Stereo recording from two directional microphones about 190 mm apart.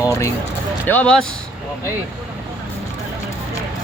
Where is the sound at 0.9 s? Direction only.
5° left (ahead or behind).